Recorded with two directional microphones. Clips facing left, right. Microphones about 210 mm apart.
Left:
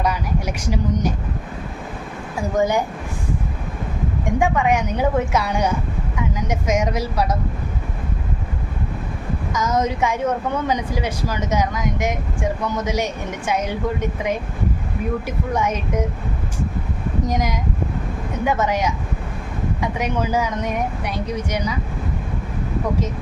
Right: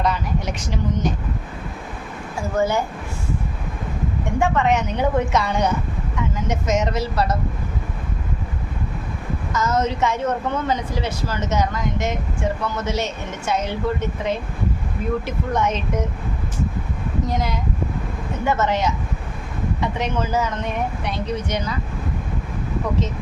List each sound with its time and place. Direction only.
0.0 s a woman's voice: 10° left (ahead or behind)
2.6 s a woman's voice: 15° left (ahead or behind)
4.4 s a woman's voice: 10° left (ahead or behind)
9.5 s a woman's voice: 10° left (ahead or behind)
17.2 s a woman's voice: 15° left (ahead or behind)